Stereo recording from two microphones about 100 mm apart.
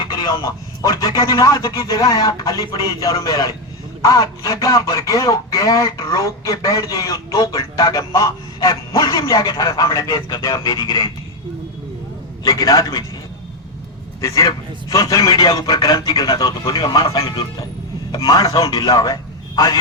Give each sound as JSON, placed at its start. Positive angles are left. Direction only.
{"t": 0.2, "sound": "speech", "side_deg": 40}
{"t": 1.7, "sound": "speech", "side_deg": 50}
{"t": 2.0, "sound": "speech", "side_deg": 35}
{"t": 12.4, "sound": "speech", "side_deg": 40}
{"t": 14.2, "sound": "a man's voice", "side_deg": 35}